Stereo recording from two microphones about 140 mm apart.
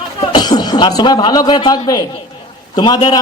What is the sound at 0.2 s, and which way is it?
A man's voice, 30° left (ahead or behind).